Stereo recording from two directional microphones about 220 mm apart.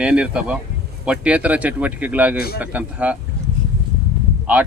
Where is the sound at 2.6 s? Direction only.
5° right (ahead or behind).